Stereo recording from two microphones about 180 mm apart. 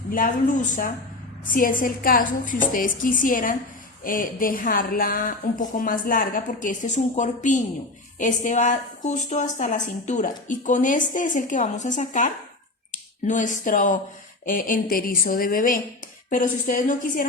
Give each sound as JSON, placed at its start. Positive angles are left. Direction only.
{"t": 0.1, "sound": "a woman's voice", "side_deg": 50}